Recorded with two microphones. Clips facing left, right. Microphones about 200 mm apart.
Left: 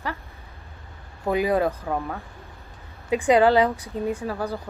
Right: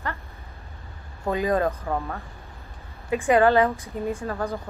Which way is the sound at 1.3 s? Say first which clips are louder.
Left 1 dB; 10° left (ahead or behind).